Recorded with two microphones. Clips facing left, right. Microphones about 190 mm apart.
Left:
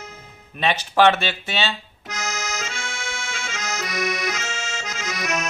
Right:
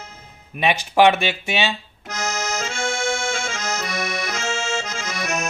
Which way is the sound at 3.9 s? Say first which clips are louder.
Left 1 dB; 30° right (ahead or behind).